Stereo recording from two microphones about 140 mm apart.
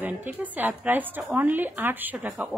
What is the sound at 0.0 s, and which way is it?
Speech, 15° right (ahead or behind).